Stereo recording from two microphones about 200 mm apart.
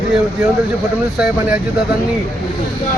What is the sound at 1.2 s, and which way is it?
Speech, 5° right (ahead or behind).